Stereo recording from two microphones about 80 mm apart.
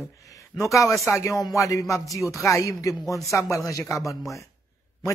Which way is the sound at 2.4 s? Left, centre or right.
Left.